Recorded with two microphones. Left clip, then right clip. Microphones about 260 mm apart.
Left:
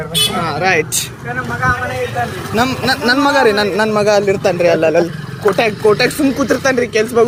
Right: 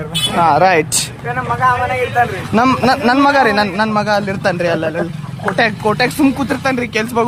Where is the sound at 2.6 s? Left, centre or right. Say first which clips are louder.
Right 3 dB; centre.